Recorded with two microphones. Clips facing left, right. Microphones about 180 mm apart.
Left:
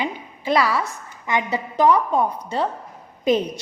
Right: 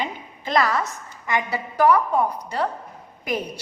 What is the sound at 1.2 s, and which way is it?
A woman's voice, 20° left (ahead or behind).